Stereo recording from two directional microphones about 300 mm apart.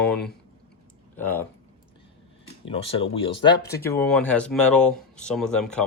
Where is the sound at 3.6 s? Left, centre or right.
Centre.